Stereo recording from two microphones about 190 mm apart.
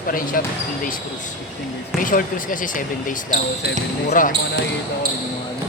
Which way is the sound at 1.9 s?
45° left (ahead or behind).